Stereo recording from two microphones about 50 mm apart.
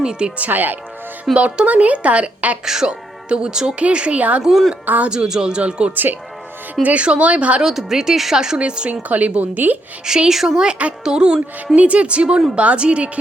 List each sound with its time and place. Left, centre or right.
0.0 s speech: centre
0.3 s a woman's voice: right
1.2 s a woman's voice: right
2.6 s a woman's voice: centre; by 4.4 s right
4.4 s a woman's voice: centre
5.0 s a woman's voice: centre
5.9 s a woman's voice: right
6.8 s a woman's voice: right
7.6 s a woman's voice: centre
8.9 s a woman's voice: right
10.1 s speech: centre
10.7 s a woman's voice: right
11.0 s speech: centre
11.8 s a woman's voice: right